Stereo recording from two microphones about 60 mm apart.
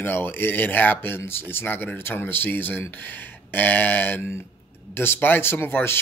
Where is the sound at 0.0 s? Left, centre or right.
Left.